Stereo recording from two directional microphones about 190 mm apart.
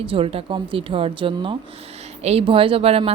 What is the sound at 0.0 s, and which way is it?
Speech, 30° right (ahead or behind).